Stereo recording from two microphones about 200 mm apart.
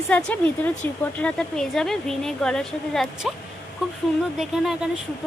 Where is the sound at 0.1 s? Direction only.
5° left (ahead or behind).